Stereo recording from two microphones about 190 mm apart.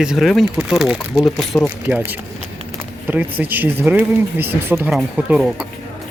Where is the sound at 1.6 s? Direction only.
10° right (ahead or behind).